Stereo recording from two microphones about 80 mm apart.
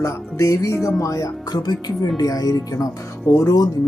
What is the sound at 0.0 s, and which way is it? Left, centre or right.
Speech, left.